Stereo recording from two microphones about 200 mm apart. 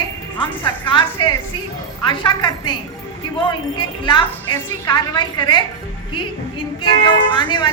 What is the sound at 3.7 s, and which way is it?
A woman's voice, 20° left (ahead or behind).